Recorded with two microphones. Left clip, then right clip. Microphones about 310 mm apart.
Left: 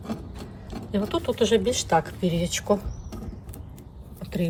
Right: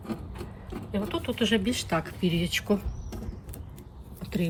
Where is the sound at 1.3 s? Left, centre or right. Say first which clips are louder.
Left 6 dB; centre.